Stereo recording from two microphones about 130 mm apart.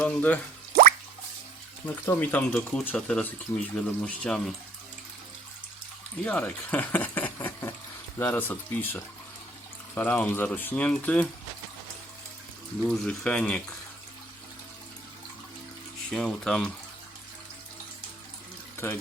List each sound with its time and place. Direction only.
0.0 s speech: 10° left (ahead or behind)
2.0 s speech: 15° left (ahead or behind)
6.2 s speech: 10° left (ahead or behind)
12.8 s speech: 10° left (ahead or behind)
16.0 s speech: 5° left (ahead or behind)
18.8 s speech: 15° left (ahead or behind)